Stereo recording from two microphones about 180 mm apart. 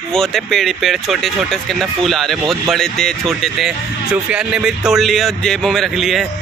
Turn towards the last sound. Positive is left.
turn(degrees=0)  # may be behind; listen again after turning